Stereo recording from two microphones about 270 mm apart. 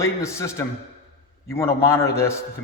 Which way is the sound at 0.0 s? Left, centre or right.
Centre.